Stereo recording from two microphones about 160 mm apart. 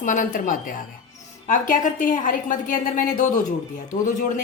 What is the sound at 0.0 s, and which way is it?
A woman's voice, 55° left (ahead or behind).